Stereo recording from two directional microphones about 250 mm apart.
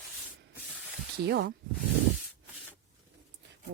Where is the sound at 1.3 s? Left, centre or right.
Right.